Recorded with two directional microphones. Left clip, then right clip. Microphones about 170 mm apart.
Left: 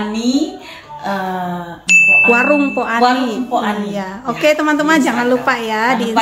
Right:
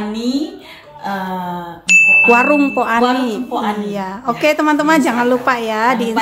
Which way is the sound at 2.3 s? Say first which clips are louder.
Right 1 dB; 30° right (ahead or behind).